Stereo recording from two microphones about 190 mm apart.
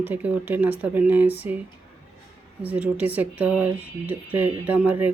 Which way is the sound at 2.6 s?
5° right (ahead or behind).